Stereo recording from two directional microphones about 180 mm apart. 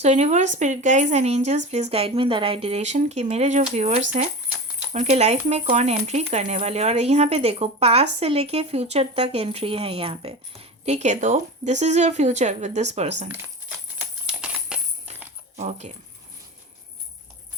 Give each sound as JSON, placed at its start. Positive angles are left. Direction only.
{"t": 0.0, "sound": "speech", "side_deg": -40}
{"t": 14.3, "sound": "a sound", "side_deg": -5}
{"t": 15.5, "sound": "speech", "side_deg": -40}